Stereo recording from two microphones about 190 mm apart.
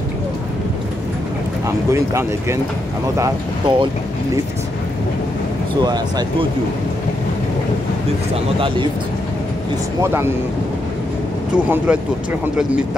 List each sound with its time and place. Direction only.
1.9 s speech: 15° right (ahead or behind)
5.8 s speech: 20° right (ahead or behind)
8.5 s speech: 25° right (ahead or behind)
10.0 s speech: 10° right (ahead or behind)
11.5 s speech: 5° right (ahead or behind)